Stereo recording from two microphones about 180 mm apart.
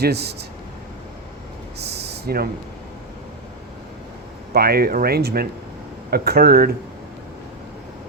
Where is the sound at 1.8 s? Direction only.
65° right (ahead or behind).